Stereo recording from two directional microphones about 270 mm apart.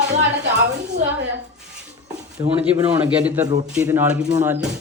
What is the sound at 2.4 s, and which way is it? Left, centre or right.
Speech, centre.